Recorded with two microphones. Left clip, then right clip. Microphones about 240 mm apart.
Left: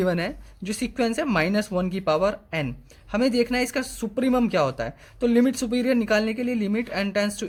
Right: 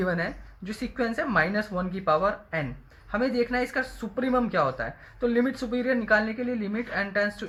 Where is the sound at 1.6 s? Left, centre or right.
Left.